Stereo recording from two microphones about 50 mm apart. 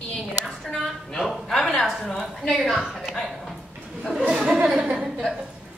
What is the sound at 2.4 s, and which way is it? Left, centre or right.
Speech, centre.